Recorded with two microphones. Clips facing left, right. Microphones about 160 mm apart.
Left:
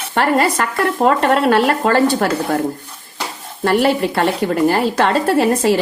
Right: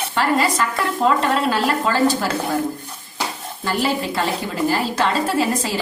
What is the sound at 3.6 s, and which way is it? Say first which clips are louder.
Speech: left 7 dB; 65° left (ahead or behind).